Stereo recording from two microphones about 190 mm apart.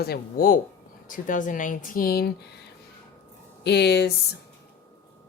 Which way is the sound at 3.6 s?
60° left (ahead or behind).